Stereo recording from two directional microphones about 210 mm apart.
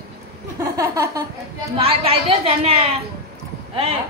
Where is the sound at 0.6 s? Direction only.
15° right (ahead or behind).